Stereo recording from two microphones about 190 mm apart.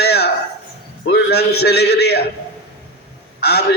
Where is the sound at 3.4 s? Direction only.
60° left (ahead or behind).